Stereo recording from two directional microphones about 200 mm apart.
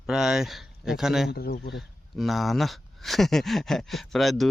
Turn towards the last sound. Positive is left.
turn(degrees=0)  # may be behind; listen again after turning